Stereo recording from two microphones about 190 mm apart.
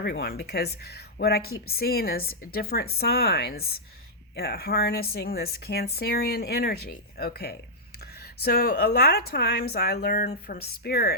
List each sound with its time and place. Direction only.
0.0 s speech: 55° left (ahead or behind)